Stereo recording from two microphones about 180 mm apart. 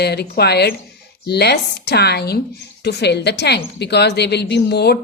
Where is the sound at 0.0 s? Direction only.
65° left (ahead or behind).